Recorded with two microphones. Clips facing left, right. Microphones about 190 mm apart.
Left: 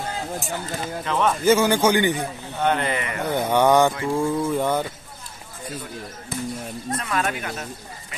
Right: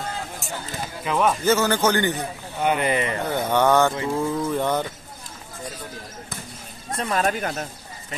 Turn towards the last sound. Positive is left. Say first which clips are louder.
# right 3 dB
turn(degrees=-40)  # may be behind; listen again after turning